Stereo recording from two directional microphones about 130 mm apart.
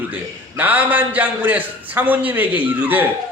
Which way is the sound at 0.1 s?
15° right (ahead or behind).